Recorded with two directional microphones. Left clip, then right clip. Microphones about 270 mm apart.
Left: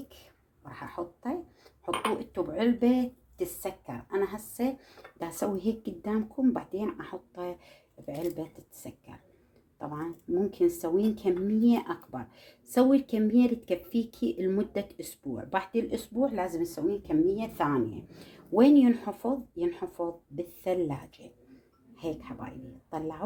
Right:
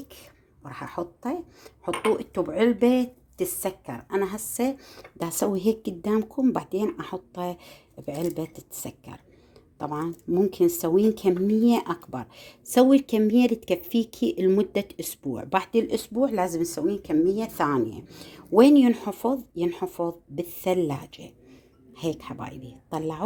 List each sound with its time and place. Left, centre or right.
0.6 s speech: right